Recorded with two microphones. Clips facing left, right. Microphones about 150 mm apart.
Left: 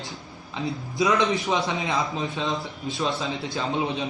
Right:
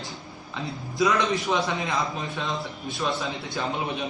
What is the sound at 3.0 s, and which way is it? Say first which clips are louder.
Speech: left 1 dB; 20° left (ahead or behind).